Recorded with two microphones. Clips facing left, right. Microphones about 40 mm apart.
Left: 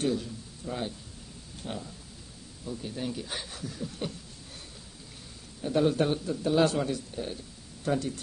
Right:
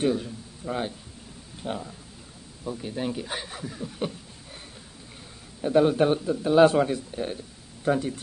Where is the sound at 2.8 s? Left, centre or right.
Right.